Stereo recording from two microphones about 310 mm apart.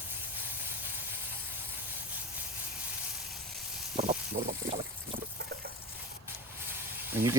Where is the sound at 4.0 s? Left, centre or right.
Right.